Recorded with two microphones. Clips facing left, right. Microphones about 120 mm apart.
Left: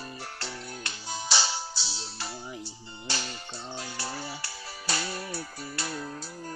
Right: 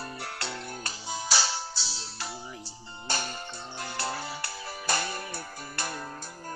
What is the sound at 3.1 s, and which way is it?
Music, 50° right (ahead or behind).